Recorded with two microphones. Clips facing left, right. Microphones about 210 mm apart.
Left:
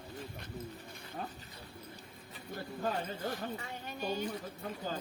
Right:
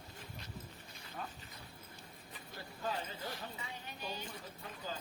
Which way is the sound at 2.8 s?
50° left (ahead or behind).